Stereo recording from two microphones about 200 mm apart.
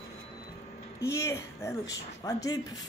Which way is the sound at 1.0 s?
15° left (ahead or behind).